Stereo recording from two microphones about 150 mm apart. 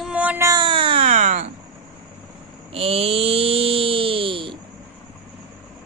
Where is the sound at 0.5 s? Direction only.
30° right (ahead or behind).